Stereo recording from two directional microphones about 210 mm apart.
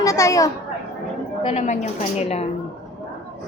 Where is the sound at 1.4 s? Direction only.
30° left (ahead or behind).